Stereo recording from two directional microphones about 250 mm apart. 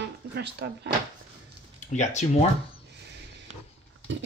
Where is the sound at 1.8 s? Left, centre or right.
Left.